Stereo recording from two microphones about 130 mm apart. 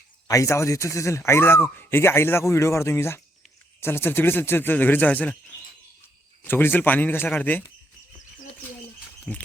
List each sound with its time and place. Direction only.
0.3 s speech: 25° left (ahead or behind)
9.3 s speech: 10° left (ahead or behind)